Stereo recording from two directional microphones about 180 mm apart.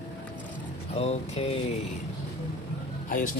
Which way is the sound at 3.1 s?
50° left (ahead or behind).